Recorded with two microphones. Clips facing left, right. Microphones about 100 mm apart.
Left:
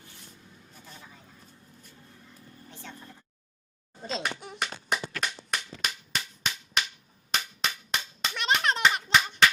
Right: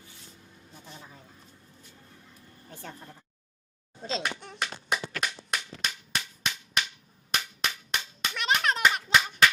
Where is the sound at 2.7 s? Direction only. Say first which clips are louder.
Right 3 dB; 45° right (ahead or behind).